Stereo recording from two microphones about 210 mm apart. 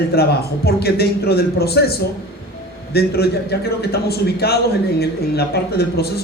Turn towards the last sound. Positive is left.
turn(degrees=50)  # may be behind; listen again after turning